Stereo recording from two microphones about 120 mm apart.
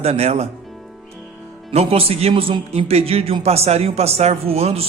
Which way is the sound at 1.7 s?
55° right (ahead or behind).